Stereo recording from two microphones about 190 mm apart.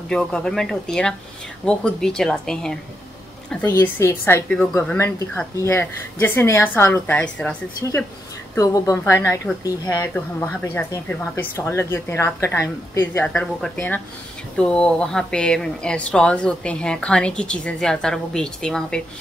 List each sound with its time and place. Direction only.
0.1 s speech: 5° left (ahead or behind)
3.7 s speech: 15° left (ahead or behind)